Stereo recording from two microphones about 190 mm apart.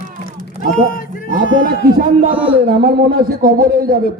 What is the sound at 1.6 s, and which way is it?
Speech, 45° right (ahead or behind).